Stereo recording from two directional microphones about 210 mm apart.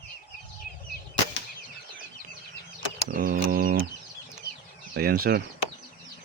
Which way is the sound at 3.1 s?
40° right (ahead or behind).